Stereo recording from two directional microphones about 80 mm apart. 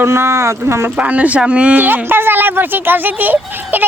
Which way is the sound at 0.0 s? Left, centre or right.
Right.